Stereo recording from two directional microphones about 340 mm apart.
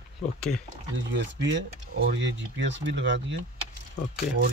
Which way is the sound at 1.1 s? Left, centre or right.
Right.